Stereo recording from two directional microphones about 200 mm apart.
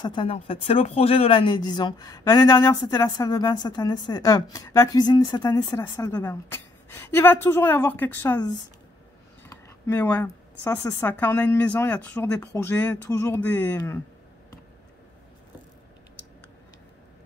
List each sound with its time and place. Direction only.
0.0 s speech: 25° left (ahead or behind)
9.5 s speech: 10° left (ahead or behind)